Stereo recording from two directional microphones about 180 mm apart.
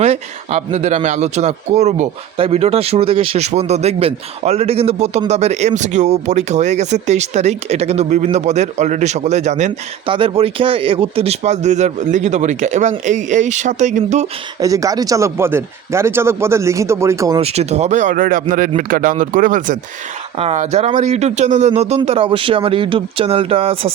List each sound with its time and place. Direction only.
0.0 s speech: 40° right (ahead or behind)
10.1 s speech: 30° right (ahead or behind)
14.6 s speech: 20° right (ahead or behind)
17.4 s speech: 35° right (ahead or behind)